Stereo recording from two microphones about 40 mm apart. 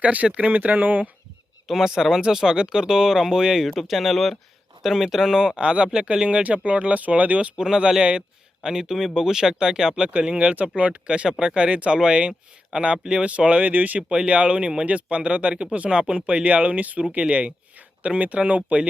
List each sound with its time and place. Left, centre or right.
0.0 s speech: right
1.6 s speech: centre
3.7 s speech: centre
4.8 s speech: centre; by 7.5 s right
7.5 s speech: centre
10.1 s speech: right
14.3 s speech: right
16.2 s speech: right